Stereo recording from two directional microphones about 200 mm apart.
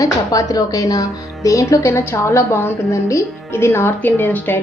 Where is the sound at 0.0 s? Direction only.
20° left (ahead or behind).